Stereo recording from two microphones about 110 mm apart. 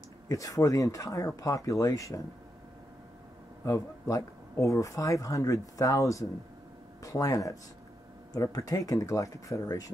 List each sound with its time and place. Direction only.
0.3 s speech: 30° left (ahead or behind)
3.6 s speech: 30° left (ahead or behind)